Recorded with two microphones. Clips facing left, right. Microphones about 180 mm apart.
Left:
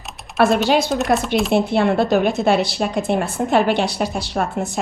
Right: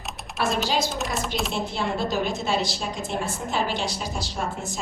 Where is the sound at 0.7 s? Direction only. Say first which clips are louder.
Left 9 dB; 60° left (ahead or behind).